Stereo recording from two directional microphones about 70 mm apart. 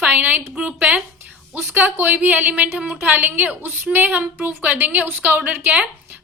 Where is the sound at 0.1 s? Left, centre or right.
Right.